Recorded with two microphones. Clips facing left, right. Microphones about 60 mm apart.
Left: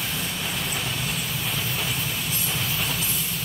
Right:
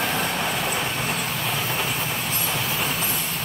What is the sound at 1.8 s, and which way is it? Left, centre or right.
Train, right.